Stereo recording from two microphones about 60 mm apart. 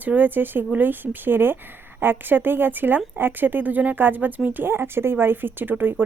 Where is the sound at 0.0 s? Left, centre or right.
Right.